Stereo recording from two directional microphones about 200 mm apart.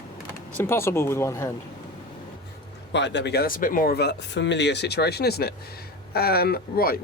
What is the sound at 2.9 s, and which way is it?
Speech, 60° left (ahead or behind).